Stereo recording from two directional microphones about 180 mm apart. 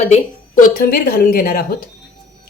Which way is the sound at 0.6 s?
55° left (ahead or behind).